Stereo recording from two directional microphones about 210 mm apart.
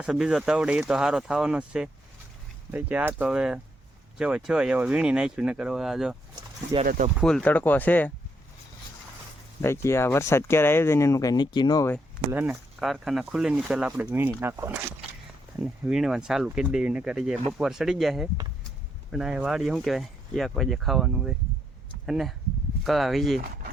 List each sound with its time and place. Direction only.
0.0 s speech: 5° right (ahead or behind)
6.8 s speech: 40° right (ahead or behind)
7.2 s speech: 5° left (ahead or behind)
9.6 s speech: 10° left (ahead or behind)
12.3 s speech: 5° right (ahead or behind)